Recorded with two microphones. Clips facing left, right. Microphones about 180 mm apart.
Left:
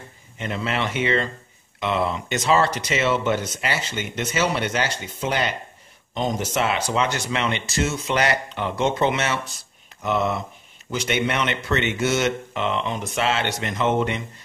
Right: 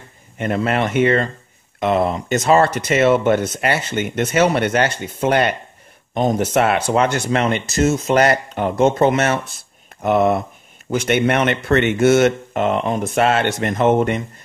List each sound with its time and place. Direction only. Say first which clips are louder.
0.4 s speech: right 7 dB; 50° right (ahead or behind)